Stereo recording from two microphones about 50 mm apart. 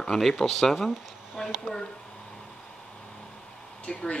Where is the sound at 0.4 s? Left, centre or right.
Centre.